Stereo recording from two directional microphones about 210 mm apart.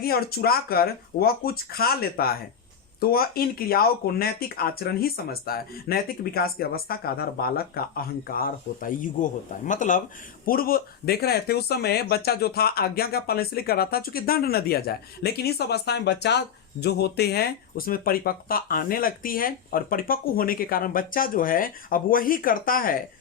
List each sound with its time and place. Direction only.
0.0 s speech: 45° left (ahead or behind)